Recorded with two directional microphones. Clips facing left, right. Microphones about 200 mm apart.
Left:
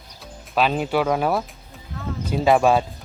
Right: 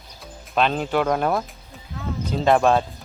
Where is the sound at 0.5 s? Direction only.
5° left (ahead or behind).